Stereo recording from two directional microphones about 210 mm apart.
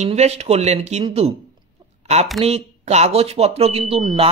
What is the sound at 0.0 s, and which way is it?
A man's voice, 30° right (ahead or behind).